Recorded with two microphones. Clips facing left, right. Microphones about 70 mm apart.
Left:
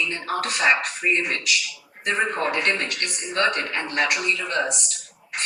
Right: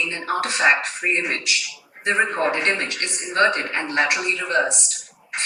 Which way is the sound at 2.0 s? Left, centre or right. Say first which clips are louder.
Right 3 dB; right.